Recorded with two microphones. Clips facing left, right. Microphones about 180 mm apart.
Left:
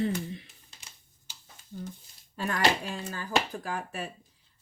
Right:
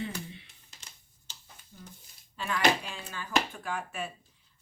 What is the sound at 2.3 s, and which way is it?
Speech, 45° left (ahead or behind).